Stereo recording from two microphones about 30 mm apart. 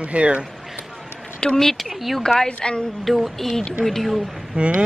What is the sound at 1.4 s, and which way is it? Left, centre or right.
Speech, left.